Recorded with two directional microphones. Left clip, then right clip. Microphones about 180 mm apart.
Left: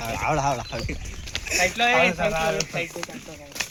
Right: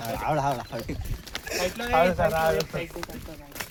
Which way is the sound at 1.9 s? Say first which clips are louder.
Right 3 dB; 40° right (ahead or behind).